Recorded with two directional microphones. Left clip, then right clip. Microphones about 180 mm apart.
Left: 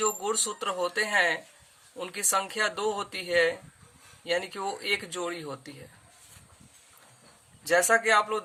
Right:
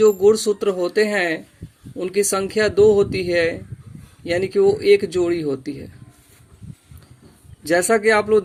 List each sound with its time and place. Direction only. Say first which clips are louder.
0.0 s speech: right 15 dB; 15° right (ahead or behind)
4.4 s speech: right 15 dB; 15° right (ahead or behind)
7.7 s speech: right 6 dB; 15° right (ahead or behind)